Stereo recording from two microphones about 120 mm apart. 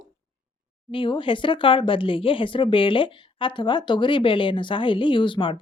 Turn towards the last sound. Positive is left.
turn(degrees=45)  # may be behind; listen again after turning